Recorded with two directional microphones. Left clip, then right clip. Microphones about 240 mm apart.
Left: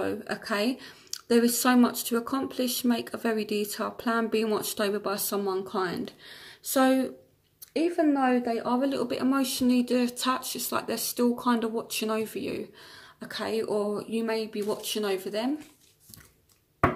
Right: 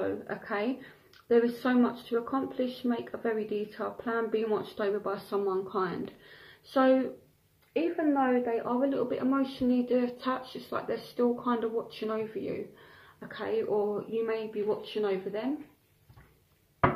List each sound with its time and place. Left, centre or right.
0.0 s speech: left